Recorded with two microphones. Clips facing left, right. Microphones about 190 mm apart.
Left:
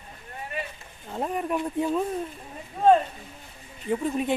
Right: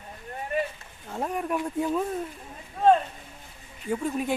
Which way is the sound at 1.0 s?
Centre (ahead or behind).